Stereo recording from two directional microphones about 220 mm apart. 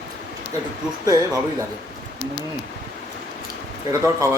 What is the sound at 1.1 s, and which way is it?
Speech, 15° right (ahead or behind).